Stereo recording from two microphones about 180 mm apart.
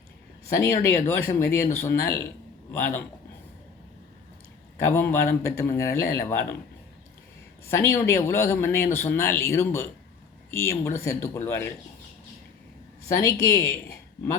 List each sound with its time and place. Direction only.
0.5 s a man's voice: 15° left (ahead or behind)
4.8 s a man's voice: 10° left (ahead or behind)
7.7 s a man's voice: 15° left (ahead or behind)
13.4 s a man's voice: 15° left (ahead or behind)